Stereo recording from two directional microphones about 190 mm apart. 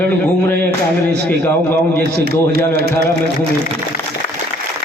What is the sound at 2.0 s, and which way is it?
A man's voice, 60° right (ahead or behind).